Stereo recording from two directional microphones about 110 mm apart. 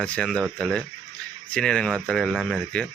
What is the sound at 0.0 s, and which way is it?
Speech, 5° left (ahead or behind).